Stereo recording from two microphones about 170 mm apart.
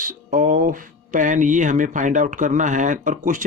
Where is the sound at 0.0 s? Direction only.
50° right (ahead or behind).